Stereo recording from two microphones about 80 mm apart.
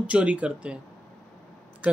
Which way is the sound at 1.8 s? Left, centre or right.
Centre.